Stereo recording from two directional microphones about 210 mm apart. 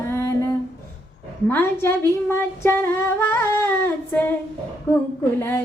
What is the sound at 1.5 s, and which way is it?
Female singing, 10° left (ahead or behind).